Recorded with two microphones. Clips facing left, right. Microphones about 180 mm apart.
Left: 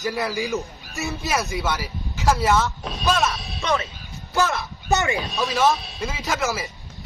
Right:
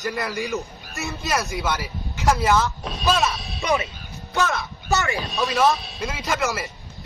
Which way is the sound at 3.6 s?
15° right (ahead or behind).